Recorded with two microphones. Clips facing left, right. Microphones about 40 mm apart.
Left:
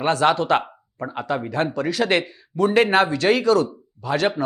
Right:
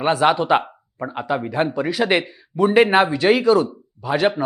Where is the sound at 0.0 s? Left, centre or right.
Centre.